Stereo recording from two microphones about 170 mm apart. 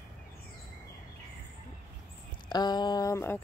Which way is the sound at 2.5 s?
25° left (ahead or behind).